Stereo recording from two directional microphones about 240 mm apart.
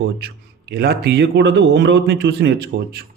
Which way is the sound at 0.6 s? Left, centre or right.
Right.